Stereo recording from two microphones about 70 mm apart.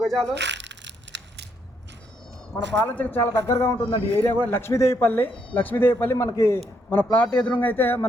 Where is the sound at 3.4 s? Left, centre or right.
Left.